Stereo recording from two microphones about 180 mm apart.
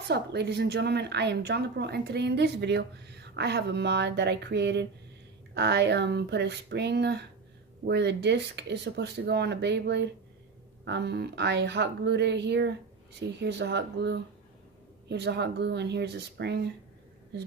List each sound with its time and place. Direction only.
0.1 s a woman's voice: 65° right (ahead or behind)